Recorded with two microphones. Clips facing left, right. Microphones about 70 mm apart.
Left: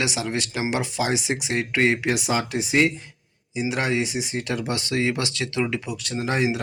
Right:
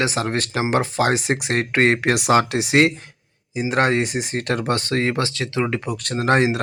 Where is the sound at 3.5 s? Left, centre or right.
Right.